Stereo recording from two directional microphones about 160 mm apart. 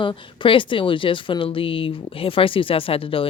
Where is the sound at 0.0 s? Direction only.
30° left (ahead or behind).